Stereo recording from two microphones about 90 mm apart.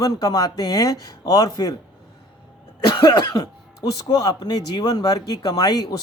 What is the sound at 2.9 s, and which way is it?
Speech, 55° left (ahead or behind).